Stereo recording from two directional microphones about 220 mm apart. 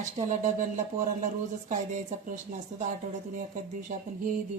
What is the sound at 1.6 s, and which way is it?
Speech, 35° right (ahead or behind).